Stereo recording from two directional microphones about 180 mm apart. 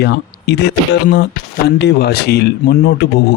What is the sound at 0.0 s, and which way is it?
Speech, 70° left (ahead or behind).